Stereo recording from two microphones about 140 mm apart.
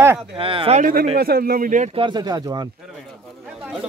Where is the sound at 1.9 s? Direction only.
35° right (ahead or behind).